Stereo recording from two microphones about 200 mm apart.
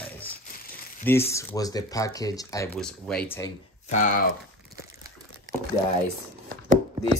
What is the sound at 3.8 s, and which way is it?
Speech, 40° left (ahead or behind).